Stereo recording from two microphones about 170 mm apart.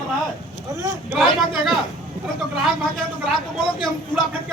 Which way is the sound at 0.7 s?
15° right (ahead or behind).